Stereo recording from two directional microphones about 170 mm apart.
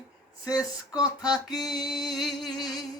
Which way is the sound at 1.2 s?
25° left (ahead or behind).